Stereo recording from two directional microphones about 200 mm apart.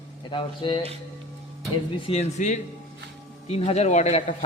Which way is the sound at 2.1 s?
35° left (ahead or behind).